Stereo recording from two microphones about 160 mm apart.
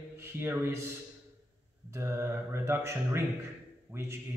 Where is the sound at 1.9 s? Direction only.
15° right (ahead or behind).